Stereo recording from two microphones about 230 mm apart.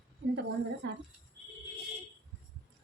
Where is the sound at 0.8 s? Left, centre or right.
Right.